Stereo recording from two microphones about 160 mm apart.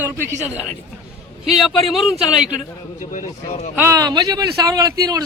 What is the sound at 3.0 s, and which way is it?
Speech, 50° left (ahead or behind).